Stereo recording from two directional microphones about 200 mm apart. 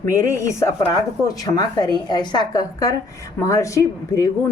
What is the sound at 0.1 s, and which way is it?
Speech, 15° left (ahead or behind).